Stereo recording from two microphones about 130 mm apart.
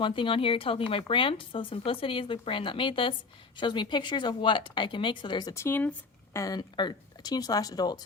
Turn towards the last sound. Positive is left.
turn(degrees=30)  # may be behind; listen again after turning